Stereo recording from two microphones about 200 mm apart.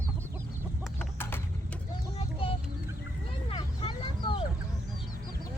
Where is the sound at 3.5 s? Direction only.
25° left (ahead or behind).